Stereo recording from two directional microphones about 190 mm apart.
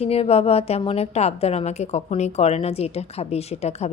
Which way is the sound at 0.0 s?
30° left (ahead or behind).